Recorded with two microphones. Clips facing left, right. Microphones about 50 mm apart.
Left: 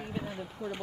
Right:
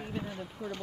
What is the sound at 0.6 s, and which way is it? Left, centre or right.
Speech, centre.